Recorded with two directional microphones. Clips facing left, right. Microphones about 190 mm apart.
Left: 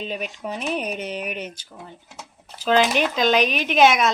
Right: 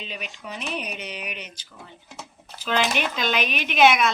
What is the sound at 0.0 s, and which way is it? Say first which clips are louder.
Speech: left 7 dB; 45° left (ahead or behind).